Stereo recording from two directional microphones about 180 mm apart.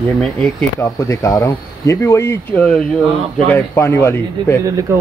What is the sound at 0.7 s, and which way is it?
Speech, 20° left (ahead or behind).